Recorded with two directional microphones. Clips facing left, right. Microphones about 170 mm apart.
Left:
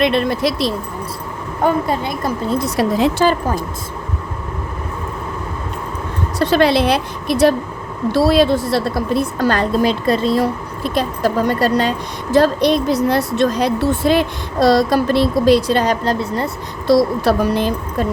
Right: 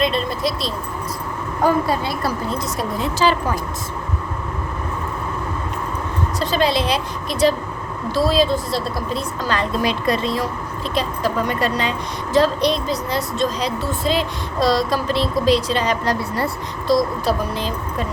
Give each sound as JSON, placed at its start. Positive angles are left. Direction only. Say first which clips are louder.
{"t": 0.0, "sound": "speech", "louder": "left 5 dB", "side_deg": 70}
{"t": 1.6, "sound": "a woman's voice", "louder": "left 1 dB", "side_deg": 20}
{"t": 2.7, "sound": "speech", "louder": "left 10 dB", "side_deg": 85}
{"t": 6.4, "sound": "speech", "louder": "left 6 dB", "side_deg": 65}
{"t": 9.6, "sound": "speech", "louder": "left 5 dB", "side_deg": 30}
{"t": 12.3, "sound": "speech", "louder": "left 4 dB", "side_deg": 55}
{"t": 16.0, "sound": "a woman's voice", "louder": "left 3 dB", "side_deg": 20}
{"t": 16.8, "sound": "speech", "louder": "left 5 dB", "side_deg": 70}